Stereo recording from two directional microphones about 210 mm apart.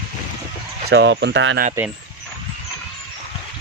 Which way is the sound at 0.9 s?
55° right (ahead or behind).